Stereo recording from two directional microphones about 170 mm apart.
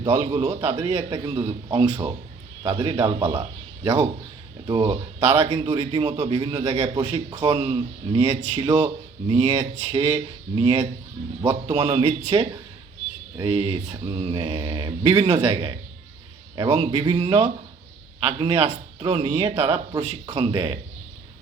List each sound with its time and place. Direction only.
0.4 s speech: 35° right (ahead or behind)